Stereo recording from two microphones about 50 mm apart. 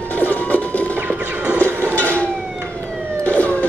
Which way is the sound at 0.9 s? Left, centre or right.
Right.